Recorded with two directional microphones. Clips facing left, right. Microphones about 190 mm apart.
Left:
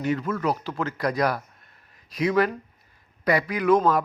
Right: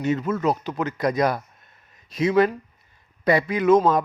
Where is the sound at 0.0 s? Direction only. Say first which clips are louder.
Right 3 dB; 20° right (ahead or behind).